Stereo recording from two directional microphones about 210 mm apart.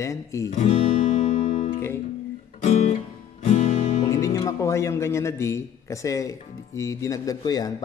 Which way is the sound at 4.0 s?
15° left (ahead or behind).